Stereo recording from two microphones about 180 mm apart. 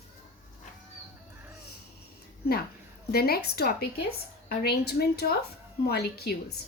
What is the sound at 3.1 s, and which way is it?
Speech, 60° left (ahead or behind).